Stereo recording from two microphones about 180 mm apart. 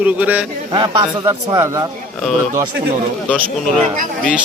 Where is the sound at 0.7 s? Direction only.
25° right (ahead or behind).